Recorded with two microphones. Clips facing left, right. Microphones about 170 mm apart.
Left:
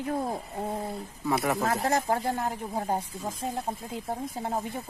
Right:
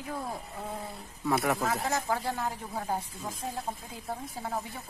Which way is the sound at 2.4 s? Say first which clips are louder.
Left 3 dB; 20° left (ahead or behind).